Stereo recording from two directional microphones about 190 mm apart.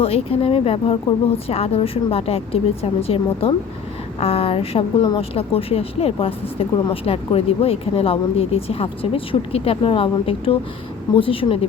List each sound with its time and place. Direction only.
0.0 s speech: 30° left (ahead or behind)